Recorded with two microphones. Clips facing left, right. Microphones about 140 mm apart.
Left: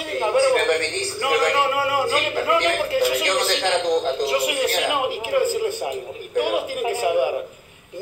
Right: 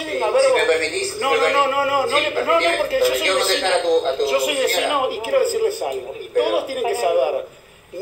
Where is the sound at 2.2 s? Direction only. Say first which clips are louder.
Right 2 dB; 35° right (ahead or behind).